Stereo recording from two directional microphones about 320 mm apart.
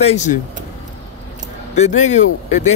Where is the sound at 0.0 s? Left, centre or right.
Left.